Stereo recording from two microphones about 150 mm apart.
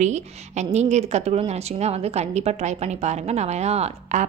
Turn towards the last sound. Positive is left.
turn(degrees=-45)  # may be behind; listen again after turning